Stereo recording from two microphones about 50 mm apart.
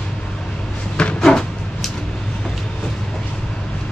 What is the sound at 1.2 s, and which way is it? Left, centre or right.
Cupboard open or close, centre.